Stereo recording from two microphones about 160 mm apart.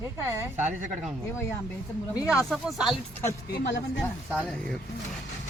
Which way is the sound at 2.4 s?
Centre (ahead or behind).